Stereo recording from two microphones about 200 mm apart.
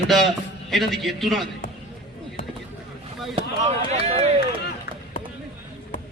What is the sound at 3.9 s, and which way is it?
Run, 30° right (ahead or behind).